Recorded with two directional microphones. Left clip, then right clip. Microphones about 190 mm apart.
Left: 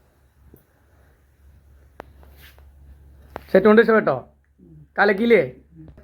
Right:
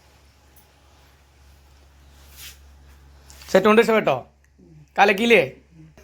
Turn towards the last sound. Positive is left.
turn(degrees=-20)  # may be behind; listen again after turning